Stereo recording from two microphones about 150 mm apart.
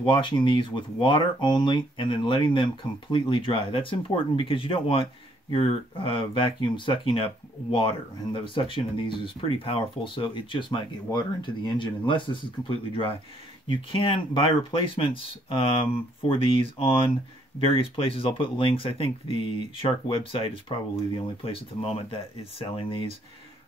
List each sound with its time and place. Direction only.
0.0 s speech: 30° left (ahead or behind)